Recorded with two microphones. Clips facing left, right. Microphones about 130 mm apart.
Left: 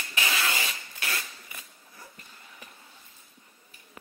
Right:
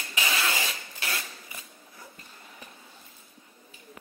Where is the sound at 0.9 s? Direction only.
30° right (ahead or behind).